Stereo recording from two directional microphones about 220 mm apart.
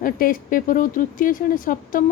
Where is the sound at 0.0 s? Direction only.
40° left (ahead or behind).